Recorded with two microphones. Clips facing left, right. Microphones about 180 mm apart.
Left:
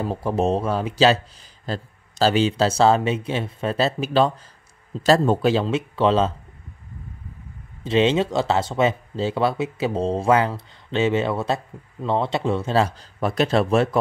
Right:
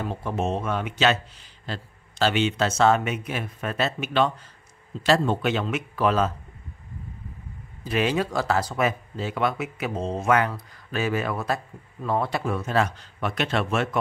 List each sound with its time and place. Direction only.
0.0 s speech: 35° left (ahead or behind)
7.8 s speech: 25° left (ahead or behind)